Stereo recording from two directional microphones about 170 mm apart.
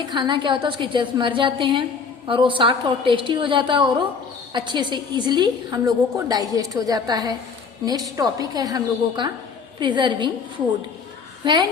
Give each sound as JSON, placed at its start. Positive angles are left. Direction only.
{"t": 0.0, "sound": "a woman's voice", "side_deg": -25}